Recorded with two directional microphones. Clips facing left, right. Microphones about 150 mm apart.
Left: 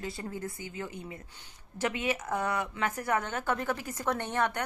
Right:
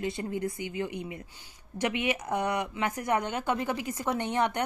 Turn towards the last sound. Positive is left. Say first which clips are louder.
# right 3 dB
turn(degrees=-20)  # may be behind; listen again after turning